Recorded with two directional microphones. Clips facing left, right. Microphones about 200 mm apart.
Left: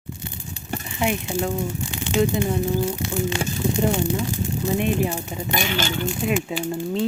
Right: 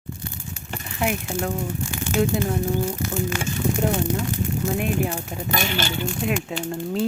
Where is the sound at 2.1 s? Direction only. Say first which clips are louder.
Left 1 dB; 15° left (ahead or behind).